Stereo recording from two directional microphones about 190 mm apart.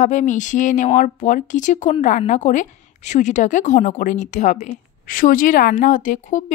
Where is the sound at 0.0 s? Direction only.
40° left (ahead or behind).